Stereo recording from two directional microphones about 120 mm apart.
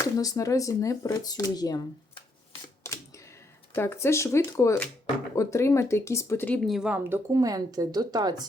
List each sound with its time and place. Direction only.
0.0 s speech: 30° left (ahead or behind)
2.8 s a sound: 25° left (ahead or behind)
3.8 s speech: 20° left (ahead or behind)
6.7 s a woman's voice: 5° right (ahead or behind)
6.9 s speech: 15° right (ahead or behind)
7.3 s a woman's voice: 30° right (ahead or behind)